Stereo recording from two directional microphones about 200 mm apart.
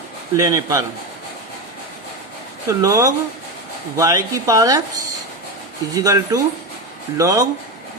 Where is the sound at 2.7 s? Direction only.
15° right (ahead or behind).